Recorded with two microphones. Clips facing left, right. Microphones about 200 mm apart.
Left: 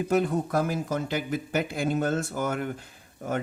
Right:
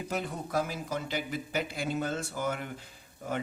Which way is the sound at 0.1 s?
55° left (ahead or behind).